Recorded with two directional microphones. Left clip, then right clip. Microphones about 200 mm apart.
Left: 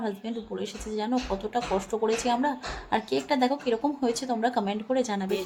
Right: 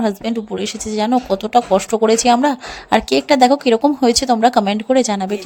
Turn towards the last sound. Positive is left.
turn(degrees=-45)  # may be behind; listen again after turning